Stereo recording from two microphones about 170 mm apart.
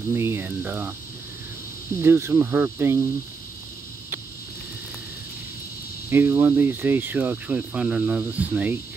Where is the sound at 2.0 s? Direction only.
15° right (ahead or behind).